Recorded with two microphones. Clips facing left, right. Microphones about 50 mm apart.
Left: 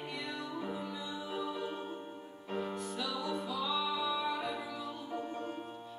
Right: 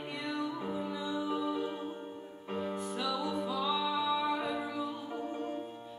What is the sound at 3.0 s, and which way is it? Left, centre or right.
Music, right.